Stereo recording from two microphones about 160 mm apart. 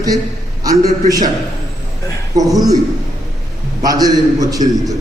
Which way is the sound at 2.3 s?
25° right (ahead or behind).